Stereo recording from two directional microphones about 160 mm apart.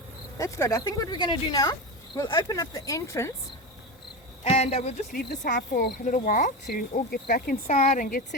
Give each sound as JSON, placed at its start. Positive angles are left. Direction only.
{"t": 0.3, "sound": "speech", "side_deg": 20}
{"t": 4.4, "sound": "speech", "side_deg": 40}
{"t": 5.5, "sound": "speech", "side_deg": 65}
{"t": 6.1, "sound": "speech", "side_deg": 50}
{"t": 6.7, "sound": "speech", "side_deg": 80}